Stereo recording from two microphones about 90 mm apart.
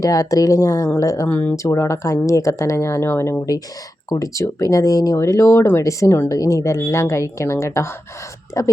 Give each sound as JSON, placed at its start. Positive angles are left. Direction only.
{"t": 0.0, "sound": "speech", "side_deg": 40}
{"t": 1.3, "sound": "speech", "side_deg": 20}
{"t": 1.5, "sound": "speech", "side_deg": 35}
{"t": 4.1, "sound": "speech", "side_deg": 40}